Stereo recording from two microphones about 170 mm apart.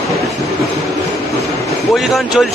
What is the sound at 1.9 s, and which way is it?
Speech, centre (ahead or behind).